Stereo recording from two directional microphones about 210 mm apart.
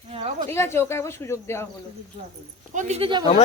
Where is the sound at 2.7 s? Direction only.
35° right (ahead or behind).